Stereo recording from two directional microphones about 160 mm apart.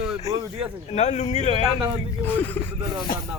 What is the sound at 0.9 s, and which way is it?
Speech, 45° left (ahead or behind).